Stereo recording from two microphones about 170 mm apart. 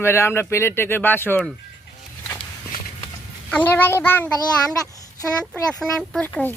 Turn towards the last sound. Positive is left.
turn(degrees=10)  # may be behind; listen again after turning